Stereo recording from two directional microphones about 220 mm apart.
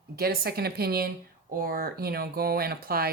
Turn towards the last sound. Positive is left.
turn(degrees=-45)  # may be behind; listen again after turning